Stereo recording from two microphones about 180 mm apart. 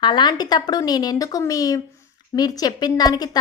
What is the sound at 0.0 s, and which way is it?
A woman's voice, 25° left (ahead or behind).